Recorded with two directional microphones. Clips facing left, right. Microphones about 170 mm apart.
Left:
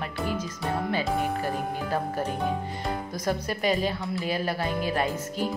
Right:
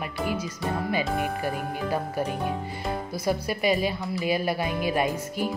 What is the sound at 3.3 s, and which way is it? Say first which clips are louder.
Speech: right 2 dB; 10° right (ahead or behind).